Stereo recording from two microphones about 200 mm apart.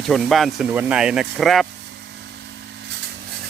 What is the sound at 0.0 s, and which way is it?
Speech, centre (ahead or behind).